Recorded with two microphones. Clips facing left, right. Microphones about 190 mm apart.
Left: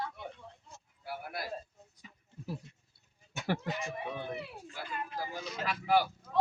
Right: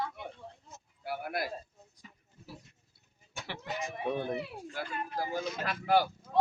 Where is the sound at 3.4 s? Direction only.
45° left (ahead or behind).